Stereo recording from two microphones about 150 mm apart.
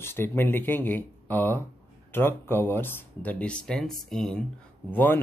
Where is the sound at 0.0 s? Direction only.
15° left (ahead or behind).